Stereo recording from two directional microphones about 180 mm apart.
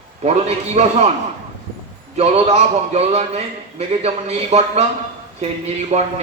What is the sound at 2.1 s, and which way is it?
A man's voice, 35° right (ahead or behind).